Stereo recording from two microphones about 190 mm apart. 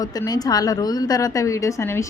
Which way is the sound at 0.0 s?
20° left (ahead or behind).